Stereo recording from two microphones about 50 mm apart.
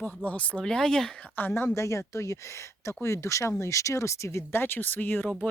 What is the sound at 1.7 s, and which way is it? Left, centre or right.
Speech, left.